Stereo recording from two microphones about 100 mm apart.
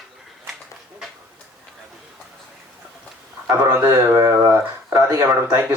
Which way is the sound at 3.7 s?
20° right (ahead or behind).